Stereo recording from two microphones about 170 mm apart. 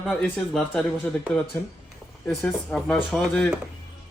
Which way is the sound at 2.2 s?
10° left (ahead or behind).